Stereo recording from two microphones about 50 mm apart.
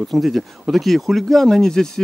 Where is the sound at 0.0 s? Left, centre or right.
Centre.